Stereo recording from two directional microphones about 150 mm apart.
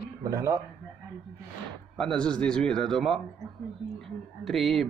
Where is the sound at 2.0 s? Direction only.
5° left (ahead or behind).